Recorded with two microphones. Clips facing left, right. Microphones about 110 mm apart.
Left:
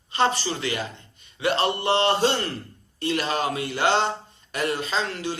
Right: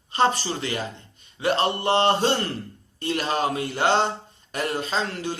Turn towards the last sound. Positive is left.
turn(degrees=-45)  # may be behind; listen again after turning